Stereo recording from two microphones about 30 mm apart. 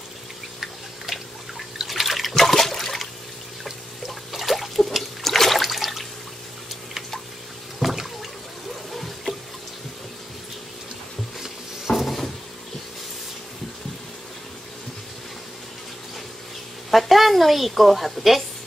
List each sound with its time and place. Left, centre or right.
0.6 s water: centre
2.3 s toilet flush: centre
4.3 s a sound: centre
4.7 s water: centre
7.8 s water: centre
8.9 s trickle: centre
11.9 s cupboard open or close: left
16.9 s a woman's voice: centre